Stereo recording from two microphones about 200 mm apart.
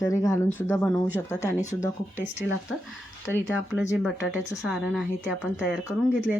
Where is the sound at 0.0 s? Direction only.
15° left (ahead or behind).